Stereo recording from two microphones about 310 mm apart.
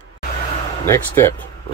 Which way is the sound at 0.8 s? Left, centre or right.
Centre.